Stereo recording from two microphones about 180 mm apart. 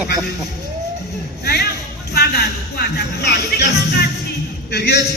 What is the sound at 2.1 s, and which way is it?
Music, 65° left (ahead or behind).